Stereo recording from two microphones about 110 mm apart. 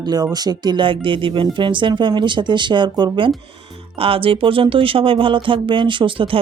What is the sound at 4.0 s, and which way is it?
Speech, 60° right (ahead or behind).